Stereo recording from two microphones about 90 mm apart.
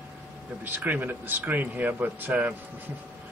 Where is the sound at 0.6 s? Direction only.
20° right (ahead or behind).